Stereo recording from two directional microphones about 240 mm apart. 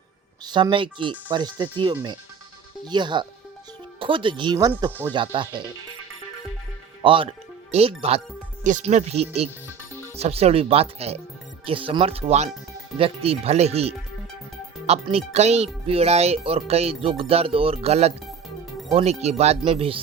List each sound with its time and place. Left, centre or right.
0.4 s speech: centre
5.1 s speech: centre
7.0 s speech: right